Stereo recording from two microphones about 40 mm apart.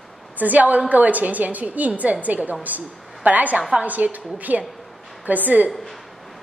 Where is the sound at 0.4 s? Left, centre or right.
Right.